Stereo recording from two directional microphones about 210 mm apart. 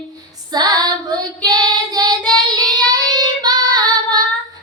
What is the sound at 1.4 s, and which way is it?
Child singing, 20° right (ahead or behind).